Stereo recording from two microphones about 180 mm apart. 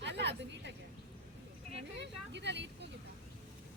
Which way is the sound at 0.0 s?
70° right (ahead or behind).